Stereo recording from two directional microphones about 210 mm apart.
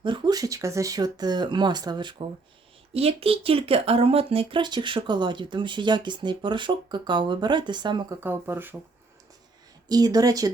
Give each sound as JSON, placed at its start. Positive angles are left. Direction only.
{"t": 0.0, "sound": "speech", "side_deg": -20}
{"t": 8.2, "sound": "speech", "side_deg": -10}
{"t": 9.9, "sound": "speech", "side_deg": -20}